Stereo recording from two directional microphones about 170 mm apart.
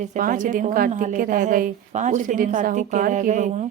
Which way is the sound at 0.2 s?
50° right (ahead or behind).